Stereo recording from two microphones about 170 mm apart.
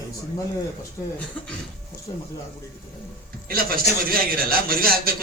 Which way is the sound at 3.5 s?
60° right (ahead or behind).